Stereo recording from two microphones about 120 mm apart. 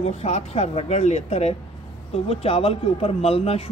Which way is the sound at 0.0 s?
60° left (ahead or behind).